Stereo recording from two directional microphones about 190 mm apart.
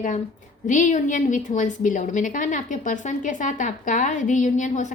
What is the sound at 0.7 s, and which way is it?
A woman's voice, 40° left (ahead or behind).